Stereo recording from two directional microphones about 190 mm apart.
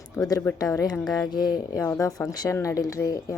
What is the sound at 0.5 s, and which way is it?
Speech, 20° left (ahead or behind).